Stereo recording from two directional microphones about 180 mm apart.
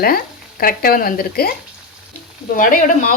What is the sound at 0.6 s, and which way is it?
Speech, 55° left (ahead or behind).